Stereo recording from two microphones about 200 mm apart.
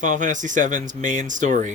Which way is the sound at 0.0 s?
40° right (ahead or behind).